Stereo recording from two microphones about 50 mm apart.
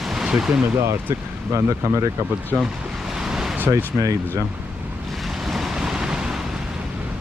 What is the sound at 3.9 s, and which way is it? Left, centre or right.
Speech, right.